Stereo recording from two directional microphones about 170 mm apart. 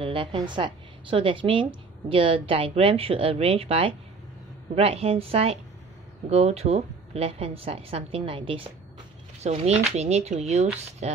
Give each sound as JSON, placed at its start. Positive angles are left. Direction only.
{"t": 0.0, "sound": "a woman's voice", "side_deg": -30}